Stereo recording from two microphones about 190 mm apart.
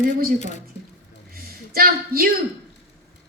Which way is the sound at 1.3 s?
50° right (ahead or behind).